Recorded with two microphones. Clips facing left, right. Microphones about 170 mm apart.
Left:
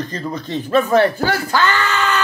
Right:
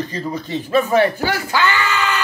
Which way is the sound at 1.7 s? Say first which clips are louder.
Left 1 dB; 45° left (ahead or behind).